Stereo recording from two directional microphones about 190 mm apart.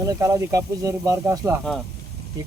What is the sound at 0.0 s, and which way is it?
Speech, 15° right (ahead or behind).